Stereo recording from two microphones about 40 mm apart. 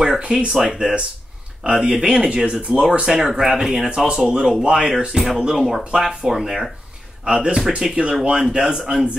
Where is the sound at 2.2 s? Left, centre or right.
Right.